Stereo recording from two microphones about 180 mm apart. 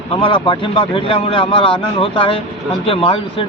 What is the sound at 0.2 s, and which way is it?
A man's voice, 30° left (ahead or behind).